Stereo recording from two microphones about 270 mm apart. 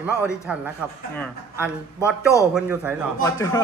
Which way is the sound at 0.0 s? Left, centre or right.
Centre.